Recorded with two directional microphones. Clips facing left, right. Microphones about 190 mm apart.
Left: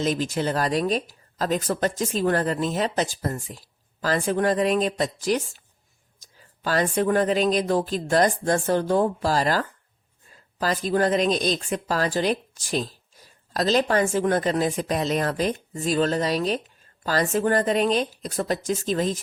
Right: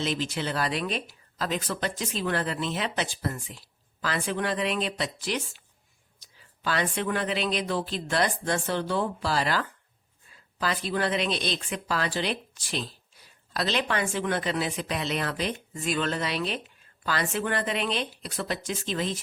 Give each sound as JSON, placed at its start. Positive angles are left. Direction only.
{"t": 0.0, "sound": "speech", "side_deg": 45}